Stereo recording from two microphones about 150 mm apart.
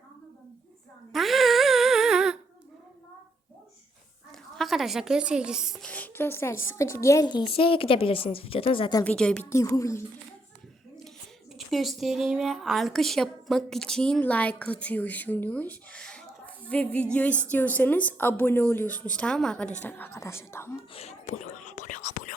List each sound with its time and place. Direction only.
1.1 s music: centre (ahead or behind)
4.5 s a woman's voice: centre (ahead or behind)
5.9 s a woman's voice: 10° left (ahead or behind); by 9.0 s 35° left (ahead or behind)
9.0 s a woman's voice: 5° left (ahead or behind)
9.5 s a woman's voice: 20° left (ahead or behind)
11.5 s a woman's voice: centre (ahead or behind); by 20.7 s 15° left (ahead or behind)
20.9 s whispering: 45° left (ahead or behind)